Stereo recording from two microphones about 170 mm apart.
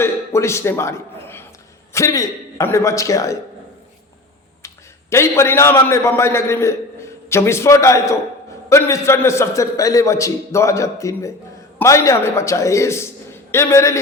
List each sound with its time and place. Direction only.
0.0 s a man's voice: 15° left (ahead or behind)
4.6 s a man's voice: 15° left (ahead or behind)